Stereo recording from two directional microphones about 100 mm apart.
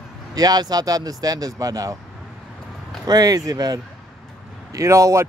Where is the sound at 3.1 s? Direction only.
40° right (ahead or behind).